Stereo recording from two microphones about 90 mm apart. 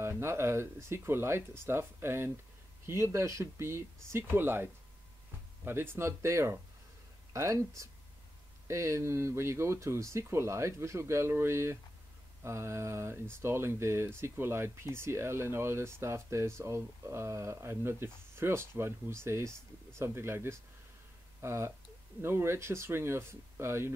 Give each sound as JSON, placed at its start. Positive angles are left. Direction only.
{"t": 0.0, "sound": "speech", "side_deg": -30}
{"t": 5.7, "sound": "speech", "side_deg": -25}